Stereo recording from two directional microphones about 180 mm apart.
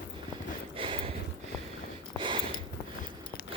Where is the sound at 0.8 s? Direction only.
30° right (ahead or behind).